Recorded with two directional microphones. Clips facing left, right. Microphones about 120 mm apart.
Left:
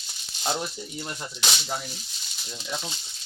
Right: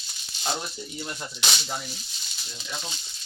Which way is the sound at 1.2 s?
5° left (ahead or behind).